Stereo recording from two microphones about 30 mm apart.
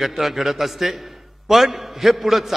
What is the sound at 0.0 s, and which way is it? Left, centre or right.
A man's voice, centre.